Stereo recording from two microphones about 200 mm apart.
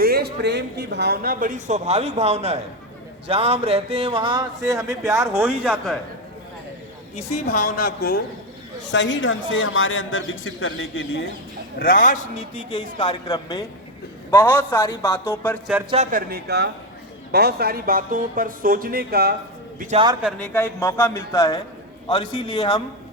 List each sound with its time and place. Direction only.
0.0 s speech: 50° right (ahead or behind); by 5.7 s 10° right (ahead or behind)
7.2 s a woman's voice: 35° left (ahead or behind)
8.9 s a man's voice: 65° left (ahead or behind); by 11.3 s 85° left
11.8 s a woman's voice: 45° left (ahead or behind)
12.5 s a man's voice: 25° left (ahead or behind)
16.1 s speech: 50° right (ahead or behind)
20.2 s a man's voice: 5° left (ahead or behind); by 22.8 s 20° left (ahead or behind)